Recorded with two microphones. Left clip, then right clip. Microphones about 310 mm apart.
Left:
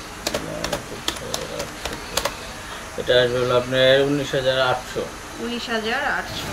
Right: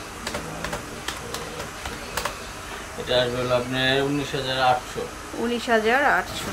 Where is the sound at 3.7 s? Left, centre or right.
Centre.